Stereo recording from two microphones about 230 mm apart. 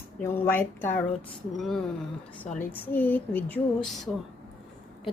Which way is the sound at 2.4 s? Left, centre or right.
Left.